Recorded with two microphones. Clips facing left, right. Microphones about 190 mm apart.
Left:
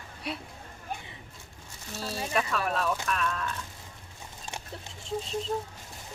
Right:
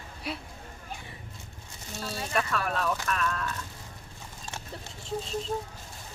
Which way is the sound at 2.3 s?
Centre (ahead or behind).